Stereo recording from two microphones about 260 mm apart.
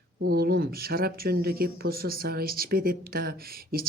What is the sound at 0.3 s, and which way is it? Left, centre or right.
Speech, right.